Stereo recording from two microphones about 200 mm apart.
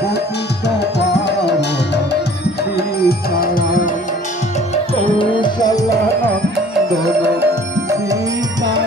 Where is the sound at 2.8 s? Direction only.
50° left (ahead or behind).